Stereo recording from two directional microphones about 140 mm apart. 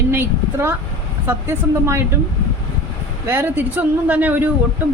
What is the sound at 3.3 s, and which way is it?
Speech, 15° right (ahead or behind).